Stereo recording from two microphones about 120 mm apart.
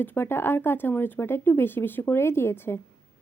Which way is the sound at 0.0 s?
15° left (ahead or behind).